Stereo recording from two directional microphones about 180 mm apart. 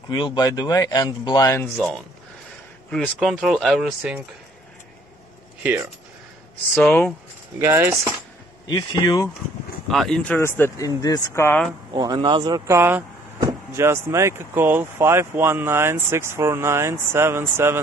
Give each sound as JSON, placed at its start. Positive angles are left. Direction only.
{"t": 0.1, "sound": "speech", "side_deg": 25}
{"t": 2.9, "sound": "speech", "side_deg": 5}
{"t": 5.6, "sound": "speech", "side_deg": -15}
{"t": 6.7, "sound": "speech", "side_deg": 5}
{"t": 7.5, "sound": "speech", "side_deg": -15}
{"t": 8.6, "sound": "speech", "side_deg": 25}
{"t": 9.8, "sound": "speech", "side_deg": 0}
{"t": 11.9, "sound": "speech", "side_deg": -25}